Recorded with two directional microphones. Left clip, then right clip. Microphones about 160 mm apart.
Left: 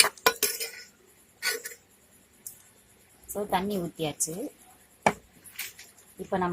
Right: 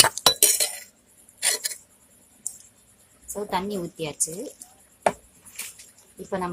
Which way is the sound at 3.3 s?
10° left (ahead or behind).